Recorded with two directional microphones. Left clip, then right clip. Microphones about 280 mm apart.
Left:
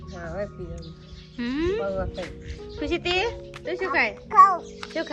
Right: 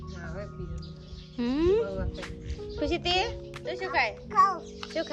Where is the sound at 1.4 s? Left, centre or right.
Centre.